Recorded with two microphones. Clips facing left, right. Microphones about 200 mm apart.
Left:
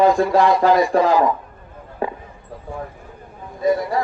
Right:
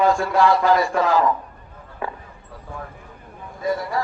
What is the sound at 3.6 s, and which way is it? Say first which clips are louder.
Speech: left 5 dB; 20° left (ahead or behind).